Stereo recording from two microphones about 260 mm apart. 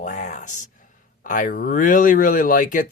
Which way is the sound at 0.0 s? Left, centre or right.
Left.